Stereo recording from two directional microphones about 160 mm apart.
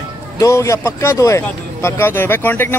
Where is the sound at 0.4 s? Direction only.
20° left (ahead or behind).